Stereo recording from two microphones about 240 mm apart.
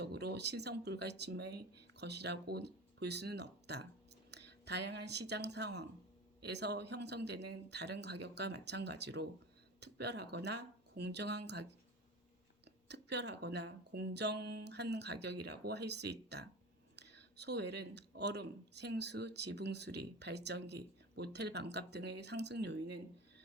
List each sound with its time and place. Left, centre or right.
0.0 s speech: right
12.6 s speech: right